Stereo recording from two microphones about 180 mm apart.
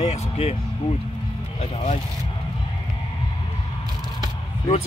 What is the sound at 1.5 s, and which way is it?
Speech, 35° left (ahead or behind).